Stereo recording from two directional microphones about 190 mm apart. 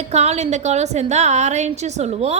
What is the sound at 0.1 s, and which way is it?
A woman's voice, 35° right (ahead or behind).